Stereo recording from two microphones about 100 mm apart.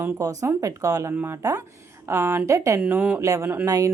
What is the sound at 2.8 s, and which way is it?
Speech, 15° right (ahead or behind).